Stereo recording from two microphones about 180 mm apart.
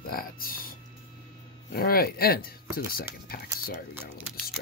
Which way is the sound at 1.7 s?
55° left (ahead or behind).